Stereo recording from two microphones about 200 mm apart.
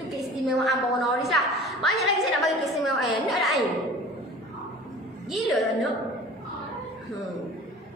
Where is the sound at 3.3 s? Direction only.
Centre (ahead or behind).